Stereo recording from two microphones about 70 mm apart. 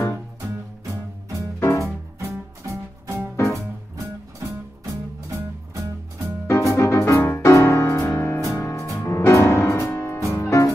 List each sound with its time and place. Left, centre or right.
1.6 s music: left
2.1 s music: right
6.4 s music: left